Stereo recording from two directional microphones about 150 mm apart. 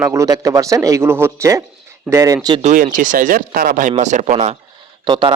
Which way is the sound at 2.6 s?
60° right (ahead or behind).